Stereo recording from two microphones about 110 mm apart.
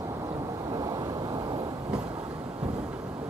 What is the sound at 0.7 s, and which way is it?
Vehicle, 35° right (ahead or behind).